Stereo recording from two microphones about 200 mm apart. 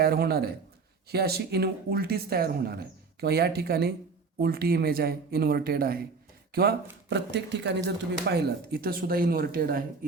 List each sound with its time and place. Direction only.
0.0 s speech: 50° right (ahead or behind)